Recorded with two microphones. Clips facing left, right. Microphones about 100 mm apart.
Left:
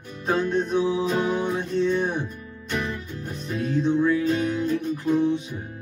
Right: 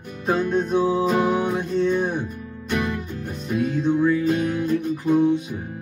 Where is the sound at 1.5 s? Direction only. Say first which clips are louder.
Right 2 dB; 5° right (ahead or behind).